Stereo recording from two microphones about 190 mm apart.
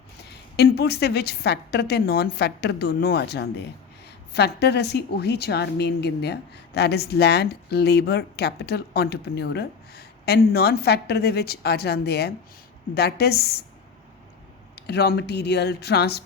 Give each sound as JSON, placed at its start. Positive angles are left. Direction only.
{"t": 0.2, "sound": "a woman's voice", "side_deg": 60}
{"t": 14.8, "sound": "a woman's voice", "side_deg": 60}